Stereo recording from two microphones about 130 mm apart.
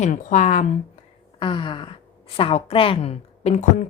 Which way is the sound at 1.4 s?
40° left (ahead or behind).